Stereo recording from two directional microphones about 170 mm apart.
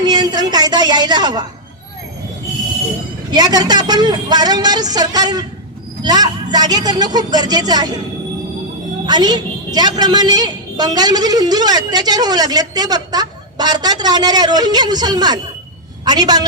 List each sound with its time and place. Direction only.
0.0 s a sound: 25° right (ahead or behind)
3.3 s a man's voice: 25° right (ahead or behind)
9.0 s a man's voice: 25° right (ahead or behind)